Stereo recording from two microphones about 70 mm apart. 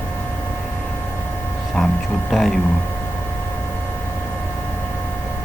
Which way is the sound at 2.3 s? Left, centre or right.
Centre.